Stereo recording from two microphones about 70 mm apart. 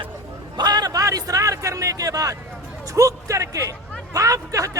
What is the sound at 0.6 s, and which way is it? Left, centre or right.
Speech, right.